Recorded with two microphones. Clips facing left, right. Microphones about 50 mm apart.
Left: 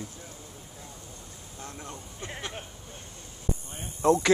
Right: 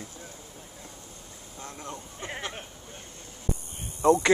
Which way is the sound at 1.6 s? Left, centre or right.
Right.